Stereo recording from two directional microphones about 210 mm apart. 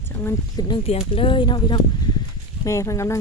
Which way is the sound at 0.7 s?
25° left (ahead or behind).